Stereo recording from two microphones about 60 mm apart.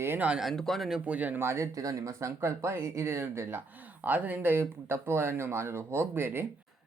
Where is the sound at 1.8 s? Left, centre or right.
Right.